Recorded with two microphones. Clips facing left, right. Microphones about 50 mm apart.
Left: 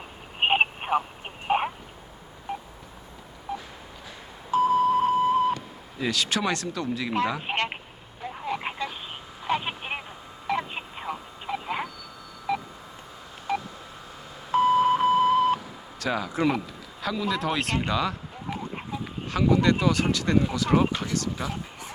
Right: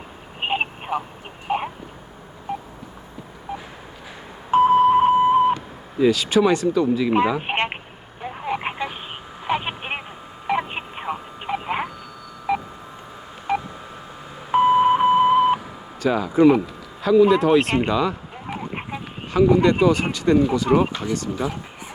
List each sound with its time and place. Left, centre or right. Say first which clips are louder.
0.3 s telephone: left 2 dB; left
1.5 s a sound: even; centre
3.5 s telephone dialing: right 2 dB; centre
4.5 s beep: right 7 dB; right
6.0 s speech: right 10 dB; centre
7.3 s speech: right 5 dB; right
8.2 s telephone: right 5 dB; right
10.7 s a sound: right 5 dB; right
12.5 s telephone dialing: right 5 dB; right
14.5 s beep: right 5 dB; right
16.0 s speech: right 9 dB; centre
18.7 s a sound: right 3 dB; right
19.3 s speech: right 6 dB; centre